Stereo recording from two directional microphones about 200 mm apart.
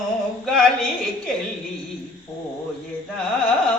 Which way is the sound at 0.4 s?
5° left (ahead or behind).